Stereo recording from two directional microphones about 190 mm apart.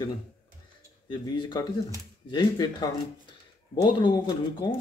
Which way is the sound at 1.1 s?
25° left (ahead or behind).